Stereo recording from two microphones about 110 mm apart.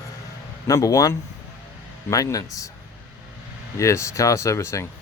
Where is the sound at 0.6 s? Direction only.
30° left (ahead or behind).